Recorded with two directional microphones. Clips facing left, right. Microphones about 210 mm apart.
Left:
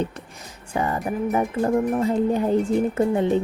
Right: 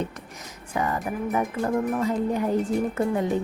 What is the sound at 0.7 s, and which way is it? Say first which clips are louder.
Speech: left 3 dB; 30° left (ahead or behind).